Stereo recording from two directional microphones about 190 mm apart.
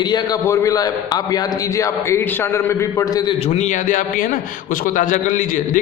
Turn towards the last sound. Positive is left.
turn(degrees=45)  # may be behind; listen again after turning